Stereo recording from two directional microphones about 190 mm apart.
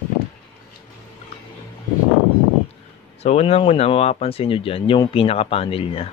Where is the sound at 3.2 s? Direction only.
35° left (ahead or behind).